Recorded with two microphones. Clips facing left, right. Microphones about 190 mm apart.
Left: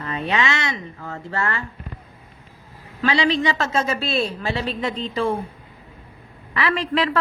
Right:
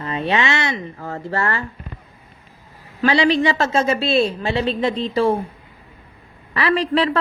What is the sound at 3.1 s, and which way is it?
A woman's voice, 35° right (ahead or behind).